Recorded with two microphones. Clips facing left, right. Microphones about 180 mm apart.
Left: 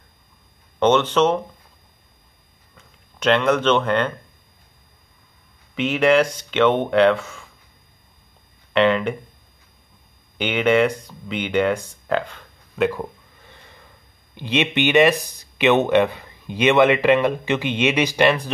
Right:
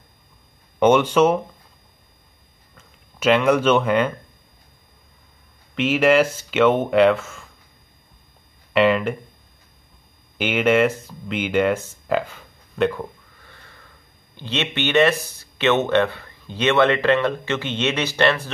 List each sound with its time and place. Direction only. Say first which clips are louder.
0.7 s speech: right 2 dB; 10° right (ahead or behind)
2.8 s speech: right 1 dB; 5° right (ahead or behind)
5.8 s speech: even; 5° right (ahead or behind)
8.7 s speech: even; 5° right (ahead or behind)
10.3 s speech: even; 5° right (ahead or behind)
13.5 s sniff: left 2 dB; 20° left (ahead or behind)
14.3 s speech: left 5 dB; 15° left (ahead or behind)